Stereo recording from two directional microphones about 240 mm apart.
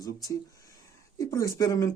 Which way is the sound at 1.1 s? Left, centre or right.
Centre.